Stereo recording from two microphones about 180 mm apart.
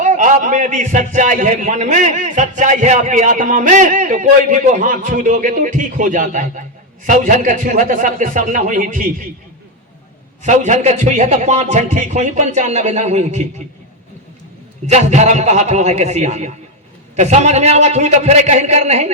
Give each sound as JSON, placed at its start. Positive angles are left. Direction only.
{"t": 0.0, "sound": "a man's voice", "side_deg": -45}
{"t": 10.4, "sound": "a man's voice", "side_deg": -40}
{"t": 14.8, "sound": "a man's voice", "side_deg": -40}